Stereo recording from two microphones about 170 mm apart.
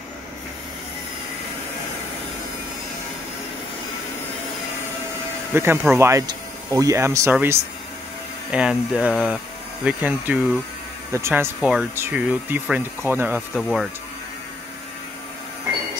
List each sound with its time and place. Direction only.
5.5 s speech: 15° right (ahead or behind)
13.6 s speech: centre (ahead or behind)